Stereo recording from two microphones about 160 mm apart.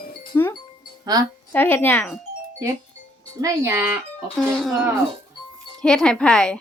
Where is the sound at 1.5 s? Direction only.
10° left (ahead or behind).